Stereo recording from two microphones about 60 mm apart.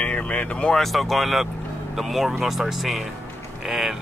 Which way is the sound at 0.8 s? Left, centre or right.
Centre.